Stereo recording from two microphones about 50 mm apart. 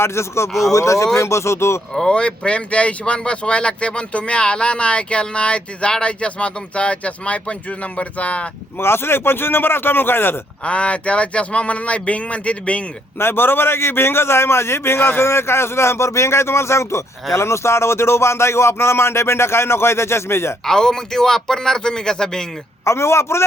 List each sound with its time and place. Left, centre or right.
0.0 s a man's voice: left
0.7 s speech: left
1.2 s a man's voice: left
2.0 s speech: centre
8.8 s a man's voice: left
10.7 s speech: left
13.1 s a man's voice: left
20.7 s a man's voice: centre
22.8 s a man's voice: left